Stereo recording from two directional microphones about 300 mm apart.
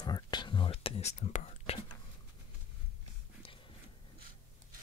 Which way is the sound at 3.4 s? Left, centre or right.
Centre.